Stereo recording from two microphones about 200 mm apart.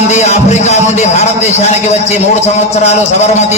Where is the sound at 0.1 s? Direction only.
35° left (ahead or behind).